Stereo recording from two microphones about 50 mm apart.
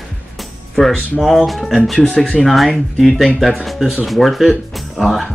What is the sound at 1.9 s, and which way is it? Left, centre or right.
Speech, centre.